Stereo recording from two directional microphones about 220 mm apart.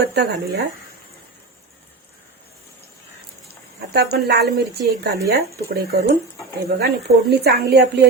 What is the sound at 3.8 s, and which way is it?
Speech, 45° right (ahead or behind).